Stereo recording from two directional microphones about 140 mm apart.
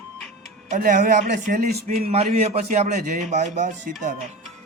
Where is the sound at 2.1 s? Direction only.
50° right (ahead or behind); by 4.3 s 65° right (ahead or behind).